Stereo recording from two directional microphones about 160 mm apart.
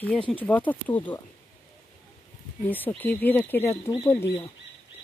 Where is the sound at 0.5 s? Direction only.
10° left (ahead or behind).